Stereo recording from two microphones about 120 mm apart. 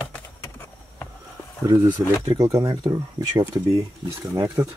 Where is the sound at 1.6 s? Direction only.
30° right (ahead or behind).